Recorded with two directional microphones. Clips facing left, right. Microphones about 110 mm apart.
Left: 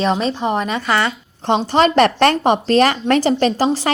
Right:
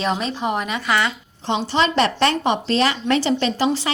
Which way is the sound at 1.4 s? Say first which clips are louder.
Left 5 dB; 50° left (ahead or behind).